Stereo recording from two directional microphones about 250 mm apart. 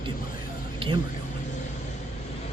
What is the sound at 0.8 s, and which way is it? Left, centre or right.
Speech, right.